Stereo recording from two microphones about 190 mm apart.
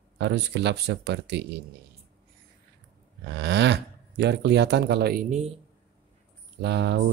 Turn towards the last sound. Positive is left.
turn(degrees=-60)  # may be behind; listen again after turning